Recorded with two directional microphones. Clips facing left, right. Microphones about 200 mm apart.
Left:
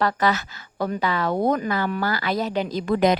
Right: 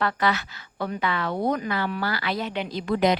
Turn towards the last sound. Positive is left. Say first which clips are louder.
# left 3 dB
turn(degrees=45)  # may be behind; listen again after turning